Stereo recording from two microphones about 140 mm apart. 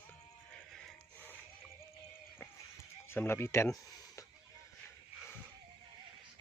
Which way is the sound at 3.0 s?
15° left (ahead or behind).